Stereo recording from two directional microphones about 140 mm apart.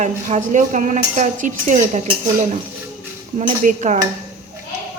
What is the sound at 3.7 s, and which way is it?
Speech, 60° right (ahead or behind).